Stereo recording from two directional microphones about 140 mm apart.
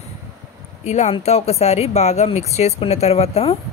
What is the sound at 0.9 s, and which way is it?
Speech, 55° left (ahead or behind).